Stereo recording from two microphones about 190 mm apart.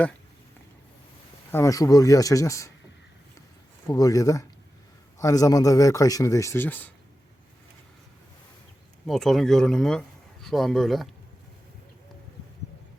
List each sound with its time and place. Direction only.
1.5 s speech: 15° left (ahead or behind)
3.8 s speech: 20° left (ahead or behind)
9.0 s speech: centre (ahead or behind)